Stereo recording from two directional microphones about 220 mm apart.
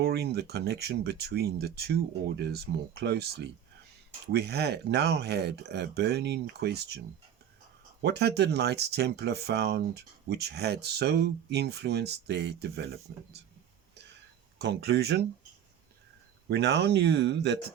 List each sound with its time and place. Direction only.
0.0 s speech: 45° right (ahead or behind)
8.0 s speech: 50° right (ahead or behind)
14.6 s speech: 50° right (ahead or behind)
16.5 s speech: 50° right (ahead or behind)